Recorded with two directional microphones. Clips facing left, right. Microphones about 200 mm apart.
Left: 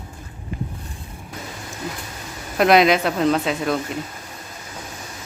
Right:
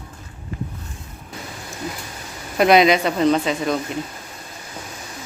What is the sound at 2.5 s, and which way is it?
Speech, centre (ahead or behind).